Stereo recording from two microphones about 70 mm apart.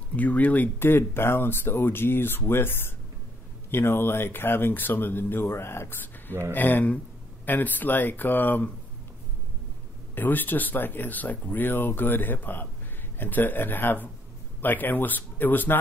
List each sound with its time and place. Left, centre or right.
0.1 s speech: left
10.1 s speech: left